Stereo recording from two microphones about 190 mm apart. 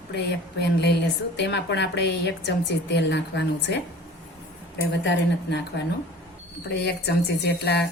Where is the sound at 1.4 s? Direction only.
65° left (ahead or behind).